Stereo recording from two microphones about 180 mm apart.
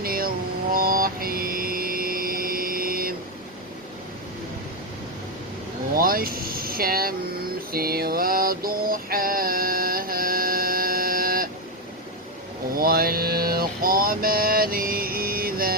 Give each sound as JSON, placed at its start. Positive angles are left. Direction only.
{"t": 0.0, "sound": "vehicle", "side_deg": -55}
{"t": 0.7, "sound": "a sound", "side_deg": -55}
{"t": 5.9, "sound": "vehicle", "side_deg": -55}
{"t": 7.7, "sound": "mantra", "side_deg": -55}
{"t": 12.8, "sound": "mantra", "side_deg": -55}